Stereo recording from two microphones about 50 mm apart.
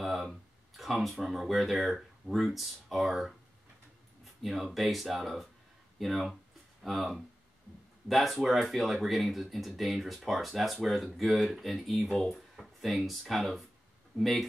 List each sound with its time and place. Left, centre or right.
0.0 s speech: centre